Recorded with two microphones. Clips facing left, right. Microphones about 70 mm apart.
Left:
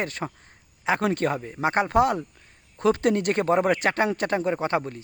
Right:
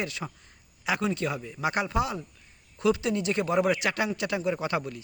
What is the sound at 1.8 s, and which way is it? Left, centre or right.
A man's voice, left.